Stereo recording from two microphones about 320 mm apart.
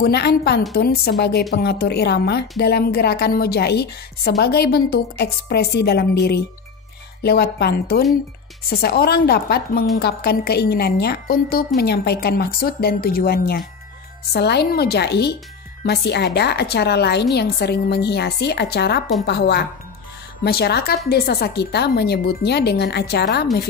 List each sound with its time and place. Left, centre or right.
0.0 s a woman's voice: left